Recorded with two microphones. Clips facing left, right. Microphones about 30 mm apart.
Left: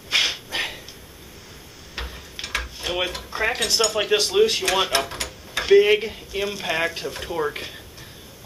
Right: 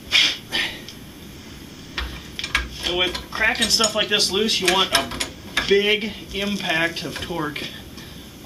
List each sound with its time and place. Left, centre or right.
0.1 s snort: centre
2.0 s tick-tock: centre
3.1 s speech: centre